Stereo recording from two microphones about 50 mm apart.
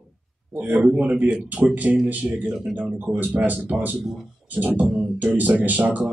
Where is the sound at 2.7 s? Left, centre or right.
Centre.